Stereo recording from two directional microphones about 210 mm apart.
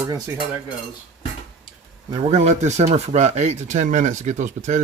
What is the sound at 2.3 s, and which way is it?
Speech, 35° right (ahead or behind).